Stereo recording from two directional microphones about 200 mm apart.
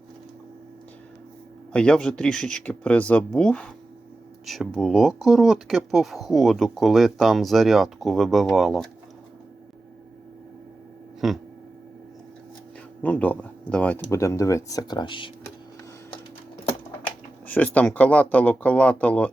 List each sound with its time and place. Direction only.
1.7 s speech: 5° left (ahead or behind)
11.2 s speech: centre (ahead or behind)
13.0 s speech: 5° left (ahead or behind); by 15.3 s 25° left (ahead or behind)
17.4 s speech: 10° left (ahead or behind)